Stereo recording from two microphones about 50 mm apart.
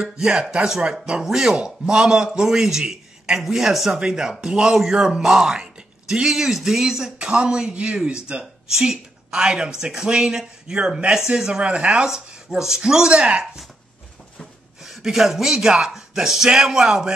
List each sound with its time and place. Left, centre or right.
0.0 s speech: centre
11.1 s speech: centre
11.6 s speech: right
12.1 s speech: centre
13.1 s speech: right
14.9 s speech: centre